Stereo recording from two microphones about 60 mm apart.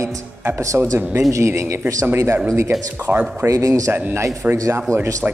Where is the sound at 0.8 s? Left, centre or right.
Right.